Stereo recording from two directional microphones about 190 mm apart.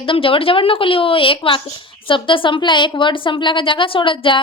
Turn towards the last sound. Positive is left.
turn(degrees=25)  # may be behind; listen again after turning